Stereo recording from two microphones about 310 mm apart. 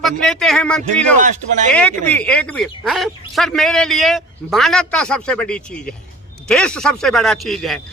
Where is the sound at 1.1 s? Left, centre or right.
Right.